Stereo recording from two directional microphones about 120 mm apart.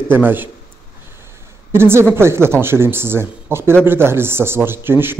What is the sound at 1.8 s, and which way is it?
Speech, 20° right (ahead or behind).